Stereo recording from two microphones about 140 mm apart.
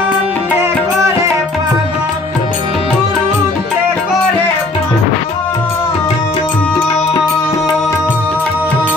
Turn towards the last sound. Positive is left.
turn(degrees=10)  # may be behind; listen again after turning